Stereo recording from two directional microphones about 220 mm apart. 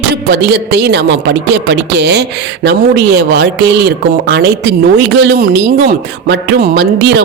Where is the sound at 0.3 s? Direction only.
50° right (ahead or behind).